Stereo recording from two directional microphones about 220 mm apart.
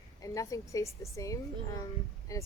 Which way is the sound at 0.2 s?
15° left (ahead or behind).